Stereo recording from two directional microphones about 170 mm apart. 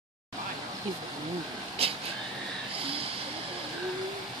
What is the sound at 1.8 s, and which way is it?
Vehicle, 35° right (ahead or behind).